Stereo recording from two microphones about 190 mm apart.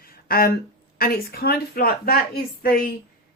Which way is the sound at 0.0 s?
50° left (ahead or behind).